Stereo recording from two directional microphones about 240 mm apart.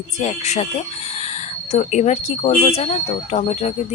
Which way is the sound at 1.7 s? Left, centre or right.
Left.